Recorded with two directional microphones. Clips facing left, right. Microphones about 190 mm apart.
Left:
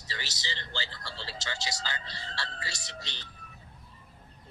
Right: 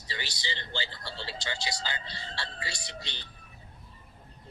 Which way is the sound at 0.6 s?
25° right (ahead or behind).